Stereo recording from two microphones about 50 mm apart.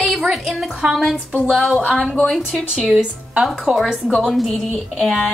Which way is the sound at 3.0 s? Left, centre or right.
Right.